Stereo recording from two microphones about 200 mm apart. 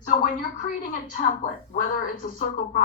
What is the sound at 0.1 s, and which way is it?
A woman's voice, 40° left (ahead or behind).